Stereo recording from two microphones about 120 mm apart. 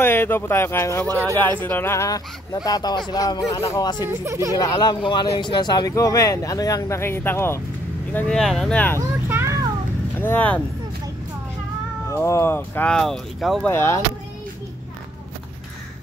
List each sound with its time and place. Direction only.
0.0 s speech: 20° left (ahead or behind)
1.0 s speech: 25° right (ahead or behind)
1.4 s speech: 15° left (ahead or behind)
4.0 s speech: 20° right (ahead or behind)
4.7 s speech: 40° left (ahead or behind); by 9.0 s 15° left (ahead or behind)
9.3 s a sound: 25° right (ahead or behind)
10.1 s speech: 15° left (ahead or behind)
12.1 s speech: 25° left (ahead or behind)
12.9 s speech: centre (ahead or behind)
13.7 s speech: 20° left (ahead or behind)